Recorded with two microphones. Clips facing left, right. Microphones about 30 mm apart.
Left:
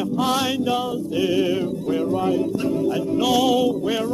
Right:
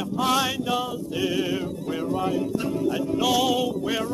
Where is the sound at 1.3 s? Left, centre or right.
Centre.